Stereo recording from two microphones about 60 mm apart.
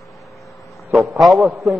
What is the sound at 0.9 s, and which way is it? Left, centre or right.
Speech, centre.